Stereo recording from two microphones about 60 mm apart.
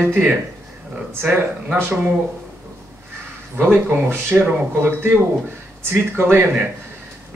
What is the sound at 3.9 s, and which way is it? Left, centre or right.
Speech, right.